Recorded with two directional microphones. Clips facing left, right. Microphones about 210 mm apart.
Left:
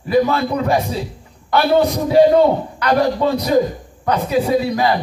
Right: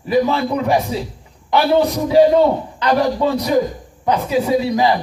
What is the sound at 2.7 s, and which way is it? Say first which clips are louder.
A man's voice: even; 15° right (ahead or behind).